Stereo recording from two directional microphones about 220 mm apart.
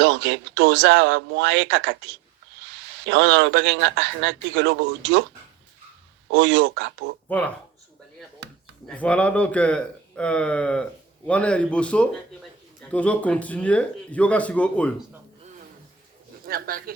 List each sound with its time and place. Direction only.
0.0 s a man's voice: 55° right (ahead or behind)
3.1 s a man's voice: 55° right (ahead or behind)
6.3 s speech: 55° right (ahead or behind)
7.3 s speech: 5° left (ahead or behind)
8.4 s chop: 50° right (ahead or behind)
8.9 s speech: 5° left (ahead or behind)
16.5 s speech: 40° right (ahead or behind)